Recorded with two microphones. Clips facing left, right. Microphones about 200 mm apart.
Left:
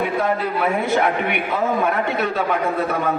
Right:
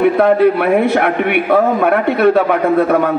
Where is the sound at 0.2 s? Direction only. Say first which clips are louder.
Right 10 dB; 65° right (ahead or behind).